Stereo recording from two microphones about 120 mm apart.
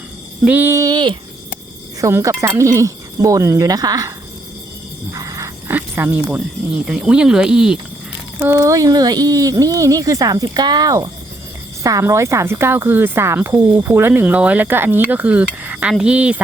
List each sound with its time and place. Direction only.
0.4 s speech: 15° right (ahead or behind); by 1.1 s 35° right (ahead or behind)
2.0 s speech: 25° right (ahead or behind)
5.1 s a sound: 25° right (ahead or behind)
5.7 s speech: 15° right (ahead or behind)
8.6 s speech: 30° right (ahead or behind); by 16.4 s 10° right (ahead or behind)